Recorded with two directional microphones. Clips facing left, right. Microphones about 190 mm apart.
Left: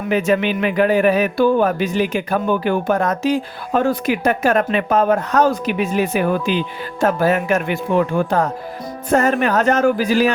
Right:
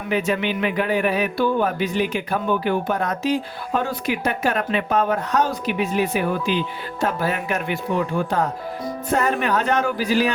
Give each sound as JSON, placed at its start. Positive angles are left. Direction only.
{"t": 0.1, "sound": "a man's voice", "side_deg": 45}